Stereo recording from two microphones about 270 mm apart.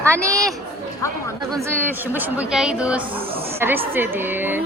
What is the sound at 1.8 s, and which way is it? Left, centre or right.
Speech, centre.